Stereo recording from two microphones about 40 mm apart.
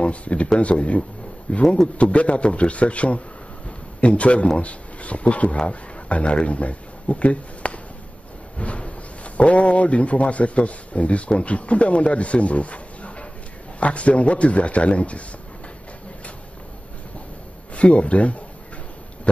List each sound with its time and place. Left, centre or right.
0.0 s a man's voice: left
17.7 s a man's voice: left
19.3 s pig: left